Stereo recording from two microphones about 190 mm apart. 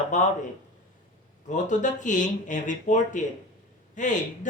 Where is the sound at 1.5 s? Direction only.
40° left (ahead or behind).